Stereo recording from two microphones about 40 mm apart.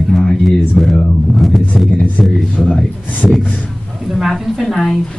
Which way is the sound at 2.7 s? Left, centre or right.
Left.